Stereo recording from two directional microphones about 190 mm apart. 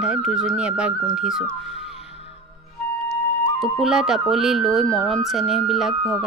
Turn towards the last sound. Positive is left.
turn(degrees=0)  # may be behind; listen again after turning